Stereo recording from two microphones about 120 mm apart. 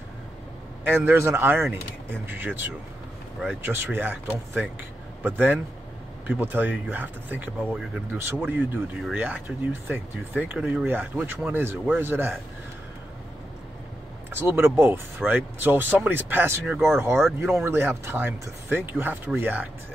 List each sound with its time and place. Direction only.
0.8 s speech: 20° right (ahead or behind)
14.3 s speech: 20° right (ahead or behind)